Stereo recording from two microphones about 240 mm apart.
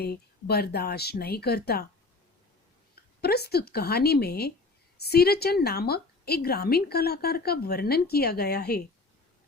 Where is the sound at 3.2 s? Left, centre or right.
Left.